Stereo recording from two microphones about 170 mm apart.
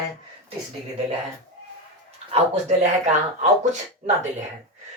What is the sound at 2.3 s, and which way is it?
Speech, 45° right (ahead or behind).